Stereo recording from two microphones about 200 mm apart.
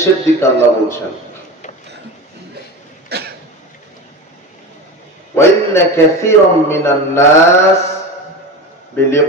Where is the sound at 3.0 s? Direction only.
55° right (ahead or behind).